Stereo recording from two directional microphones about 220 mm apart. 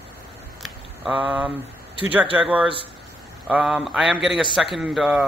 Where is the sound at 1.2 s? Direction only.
5° right (ahead or behind).